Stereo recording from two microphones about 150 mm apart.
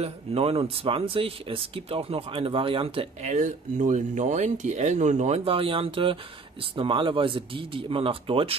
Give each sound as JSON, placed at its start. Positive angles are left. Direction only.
{"t": 0.0, "sound": "speech", "side_deg": -40}